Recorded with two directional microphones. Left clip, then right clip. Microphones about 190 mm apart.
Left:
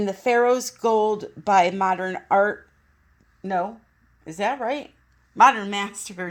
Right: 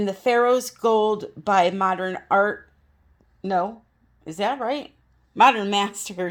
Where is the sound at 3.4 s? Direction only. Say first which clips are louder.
Right 2 dB; 15° right (ahead or behind).